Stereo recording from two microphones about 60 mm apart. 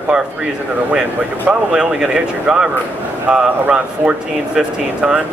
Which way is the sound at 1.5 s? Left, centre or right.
Centre.